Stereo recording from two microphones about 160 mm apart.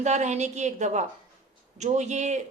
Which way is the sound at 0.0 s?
45° right (ahead or behind).